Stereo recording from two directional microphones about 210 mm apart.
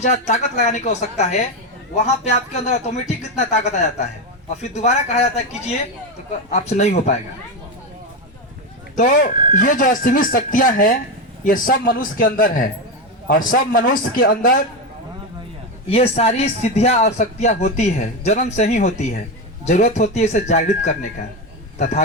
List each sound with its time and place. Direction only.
0.0 s speech: 35° left (ahead or behind)
9.0 s speech: 40° left (ahead or behind)
15.9 s speech: 30° left (ahead or behind)